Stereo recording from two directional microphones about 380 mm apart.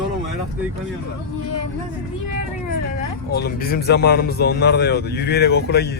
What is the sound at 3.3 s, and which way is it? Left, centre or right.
A man's voice, left.